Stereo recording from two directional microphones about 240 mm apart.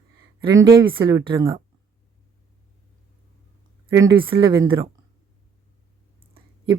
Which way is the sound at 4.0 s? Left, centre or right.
Centre.